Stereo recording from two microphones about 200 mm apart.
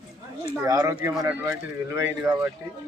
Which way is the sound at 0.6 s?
15° right (ahead or behind).